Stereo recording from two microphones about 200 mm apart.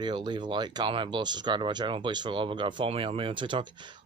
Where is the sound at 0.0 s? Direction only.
25° right (ahead or behind).